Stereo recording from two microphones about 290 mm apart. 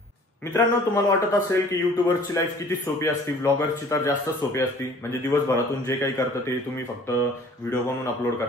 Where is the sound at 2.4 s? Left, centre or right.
Centre.